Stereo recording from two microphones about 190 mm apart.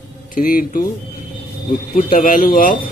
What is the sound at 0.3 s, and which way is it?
Speech, 50° left (ahead or behind).